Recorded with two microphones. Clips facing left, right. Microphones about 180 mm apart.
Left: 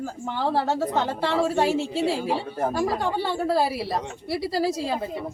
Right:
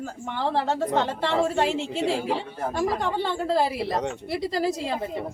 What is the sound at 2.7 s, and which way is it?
A woman's voice, 5° left (ahead or behind).